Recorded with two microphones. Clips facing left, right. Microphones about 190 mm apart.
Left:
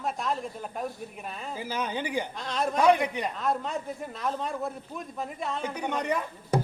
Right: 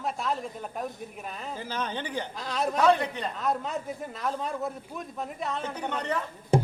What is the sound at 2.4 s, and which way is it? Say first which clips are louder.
Speech: right 4 dB; centre (ahead or behind).